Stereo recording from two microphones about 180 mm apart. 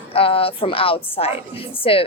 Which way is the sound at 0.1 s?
30° left (ahead or behind).